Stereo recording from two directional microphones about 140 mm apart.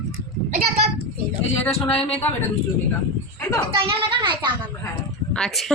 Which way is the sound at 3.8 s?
35° right (ahead or behind).